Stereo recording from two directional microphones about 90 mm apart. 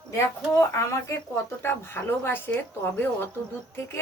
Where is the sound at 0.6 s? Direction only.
35° left (ahead or behind).